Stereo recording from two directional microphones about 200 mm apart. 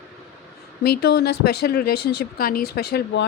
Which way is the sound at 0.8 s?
55° left (ahead or behind).